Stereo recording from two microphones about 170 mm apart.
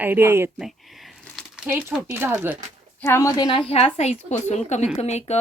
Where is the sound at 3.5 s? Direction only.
35° left (ahead or behind).